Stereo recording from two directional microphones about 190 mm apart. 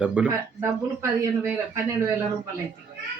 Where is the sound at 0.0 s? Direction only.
5° right (ahead or behind).